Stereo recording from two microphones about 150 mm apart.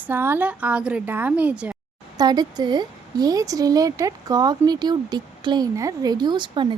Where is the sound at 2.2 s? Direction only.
25° right (ahead or behind).